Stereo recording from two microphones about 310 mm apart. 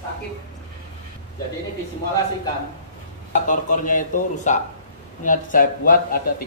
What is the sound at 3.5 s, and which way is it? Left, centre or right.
A man's voice, left.